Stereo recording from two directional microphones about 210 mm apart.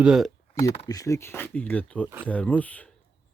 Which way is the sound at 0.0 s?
Centre (ahead or behind).